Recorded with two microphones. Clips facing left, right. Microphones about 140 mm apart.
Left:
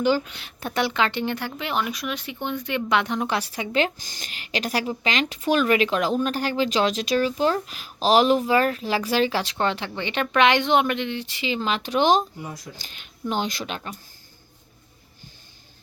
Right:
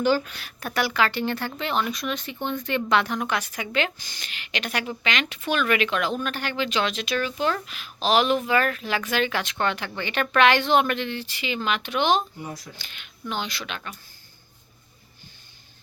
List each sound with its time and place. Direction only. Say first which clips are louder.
0.0 s speech: even; 20° left (ahead or behind); by 13.9 s 35° left (ahead or behind)